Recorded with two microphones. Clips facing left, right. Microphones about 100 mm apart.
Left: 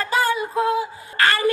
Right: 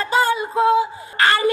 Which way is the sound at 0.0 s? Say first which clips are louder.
Right 2 dB; 25° right (ahead or behind).